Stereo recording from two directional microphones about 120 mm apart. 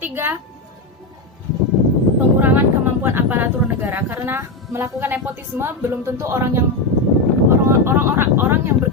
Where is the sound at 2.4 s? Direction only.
15° right (ahead or behind).